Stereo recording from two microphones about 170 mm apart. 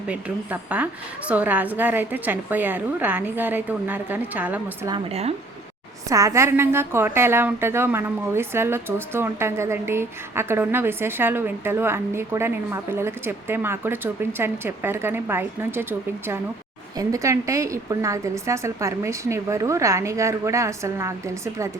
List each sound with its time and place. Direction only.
0.1 s a woman's voice: 10° right (ahead or behind)
6.1 s a woman's voice: 20° right (ahead or behind)